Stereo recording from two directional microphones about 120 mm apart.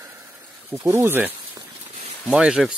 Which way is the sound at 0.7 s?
20° right (ahead or behind).